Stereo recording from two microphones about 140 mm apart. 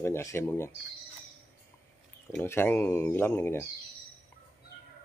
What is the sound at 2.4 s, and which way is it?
Speech, 15° left (ahead or behind).